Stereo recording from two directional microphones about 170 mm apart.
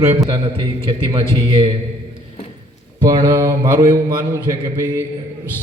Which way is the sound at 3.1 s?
20° right (ahead or behind).